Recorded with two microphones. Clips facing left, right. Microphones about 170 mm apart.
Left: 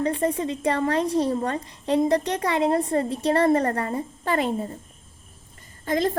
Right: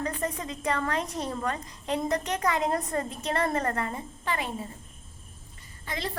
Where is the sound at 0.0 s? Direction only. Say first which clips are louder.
Left 8 dB; 30° left (ahead or behind).